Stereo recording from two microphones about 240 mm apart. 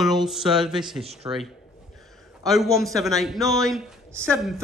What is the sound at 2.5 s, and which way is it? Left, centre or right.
Speech, centre.